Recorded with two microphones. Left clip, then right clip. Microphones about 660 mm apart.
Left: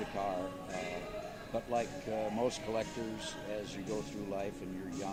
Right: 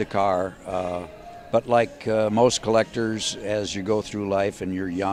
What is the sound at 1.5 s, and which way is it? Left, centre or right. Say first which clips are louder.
Speech: right 16 dB; right.